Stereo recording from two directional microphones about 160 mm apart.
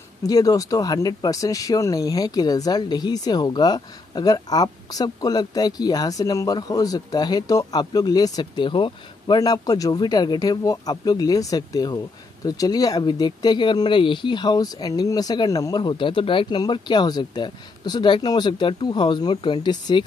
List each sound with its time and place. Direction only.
0.2 s speech: 20° left (ahead or behind)